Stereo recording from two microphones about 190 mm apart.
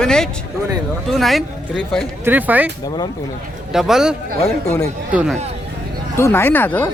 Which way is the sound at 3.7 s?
Centre (ahead or behind).